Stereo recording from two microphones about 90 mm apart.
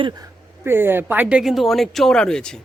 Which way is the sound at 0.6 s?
25° right (ahead or behind).